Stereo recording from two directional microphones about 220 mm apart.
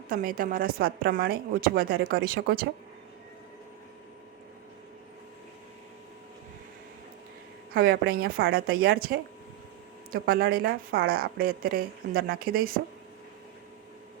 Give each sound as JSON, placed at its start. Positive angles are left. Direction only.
{"t": 0.1, "sound": "a woman's voice", "side_deg": -40}
{"t": 7.7, "sound": "speech", "side_deg": -40}